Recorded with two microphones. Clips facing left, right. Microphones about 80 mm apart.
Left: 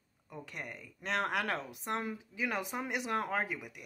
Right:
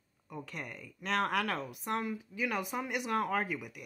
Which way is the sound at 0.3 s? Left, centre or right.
Centre.